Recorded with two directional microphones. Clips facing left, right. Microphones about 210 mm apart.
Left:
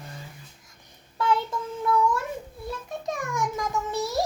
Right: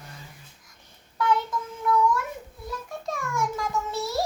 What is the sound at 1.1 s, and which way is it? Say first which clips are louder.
Child singing: even; 30° left (ahead or behind).